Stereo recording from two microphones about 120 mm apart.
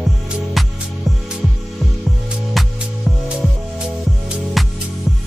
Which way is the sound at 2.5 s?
Centre (ahead or behind).